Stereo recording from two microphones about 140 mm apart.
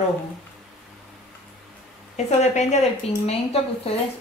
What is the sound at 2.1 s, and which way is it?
Speech, 55° left (ahead or behind).